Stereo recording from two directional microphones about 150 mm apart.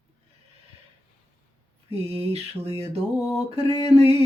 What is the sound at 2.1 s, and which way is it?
Mantra, 40° right (ahead or behind).